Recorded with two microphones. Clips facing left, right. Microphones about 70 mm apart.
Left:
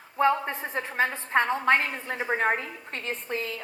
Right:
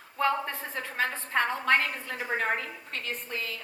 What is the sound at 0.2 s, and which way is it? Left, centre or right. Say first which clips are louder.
A woman's voice: left 4 dB; left.